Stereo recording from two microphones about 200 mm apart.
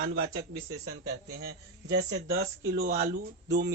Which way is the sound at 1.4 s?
55° right (ahead or behind).